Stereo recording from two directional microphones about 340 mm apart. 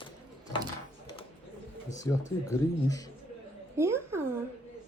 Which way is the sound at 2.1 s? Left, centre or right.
Centre.